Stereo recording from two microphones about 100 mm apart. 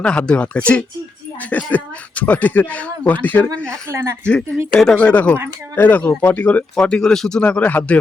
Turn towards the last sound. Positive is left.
turn(degrees=15)  # may be behind; listen again after turning